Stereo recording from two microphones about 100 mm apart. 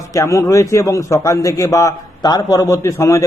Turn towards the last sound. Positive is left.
turn(degrees=30)  # may be behind; listen again after turning